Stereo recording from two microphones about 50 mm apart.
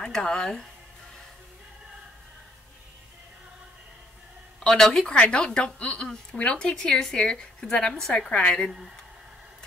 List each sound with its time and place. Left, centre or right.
0.0 s speech: centre
4.6 s speech: centre